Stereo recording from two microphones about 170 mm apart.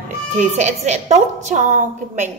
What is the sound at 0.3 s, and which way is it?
A woman's voice, 45° right (ahead or behind).